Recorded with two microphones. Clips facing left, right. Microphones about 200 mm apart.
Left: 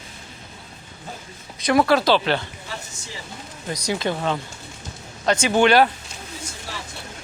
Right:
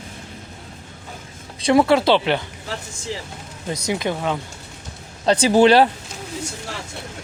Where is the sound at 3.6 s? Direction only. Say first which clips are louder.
Right 1 dB; 25° right (ahead or behind).